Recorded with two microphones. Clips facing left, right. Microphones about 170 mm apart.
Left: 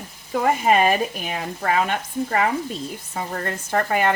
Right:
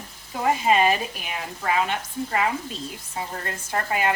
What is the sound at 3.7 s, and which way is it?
Speech, 50° left (ahead or behind).